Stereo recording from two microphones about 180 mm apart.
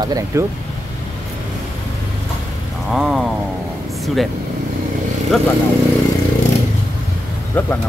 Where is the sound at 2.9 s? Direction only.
Centre (ahead or behind).